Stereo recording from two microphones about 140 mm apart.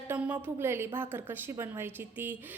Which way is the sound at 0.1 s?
15° right (ahead or behind).